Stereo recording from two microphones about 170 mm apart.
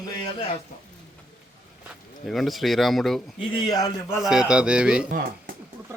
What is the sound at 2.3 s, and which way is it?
Speech, centre (ahead or behind).